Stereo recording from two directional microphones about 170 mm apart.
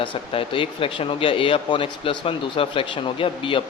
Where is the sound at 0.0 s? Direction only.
30° left (ahead or behind).